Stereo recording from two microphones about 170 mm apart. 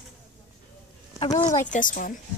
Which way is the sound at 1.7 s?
50° left (ahead or behind).